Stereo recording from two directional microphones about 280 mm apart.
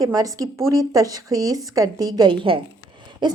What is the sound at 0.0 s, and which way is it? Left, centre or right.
Speech, centre.